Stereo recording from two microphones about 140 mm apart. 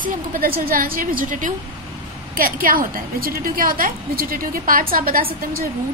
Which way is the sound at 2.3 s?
90° right.